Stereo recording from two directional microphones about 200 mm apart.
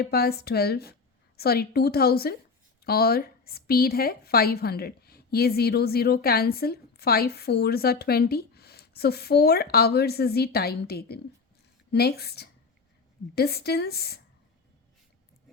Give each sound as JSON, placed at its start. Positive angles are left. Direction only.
{"t": 0.0, "sound": "speech", "side_deg": 50}